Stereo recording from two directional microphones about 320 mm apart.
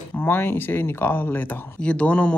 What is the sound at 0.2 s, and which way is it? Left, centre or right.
Speech, centre.